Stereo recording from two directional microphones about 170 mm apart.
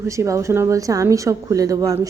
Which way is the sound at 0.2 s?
15° right (ahead or behind).